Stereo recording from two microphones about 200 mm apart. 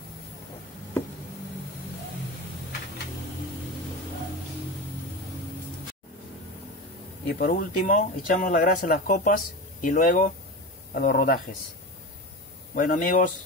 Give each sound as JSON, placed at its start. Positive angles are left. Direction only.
{"t": 7.2, "sound": "speech", "side_deg": 45}
{"t": 12.7, "sound": "speech", "side_deg": 45}